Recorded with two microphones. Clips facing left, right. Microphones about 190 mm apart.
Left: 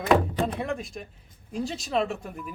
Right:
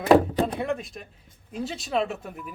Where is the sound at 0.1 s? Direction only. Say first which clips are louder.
Right 4 dB; 25° right (ahead or behind).